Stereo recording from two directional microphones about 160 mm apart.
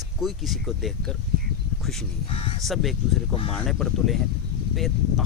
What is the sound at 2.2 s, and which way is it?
Speech, 35° left (ahead or behind).